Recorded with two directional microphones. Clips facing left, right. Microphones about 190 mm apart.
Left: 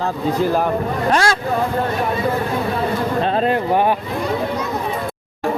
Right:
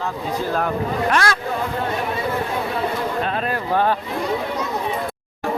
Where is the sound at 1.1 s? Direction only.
30° left (ahead or behind).